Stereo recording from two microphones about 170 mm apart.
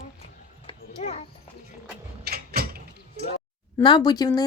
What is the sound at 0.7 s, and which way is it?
Children playing, 40° left (ahead or behind).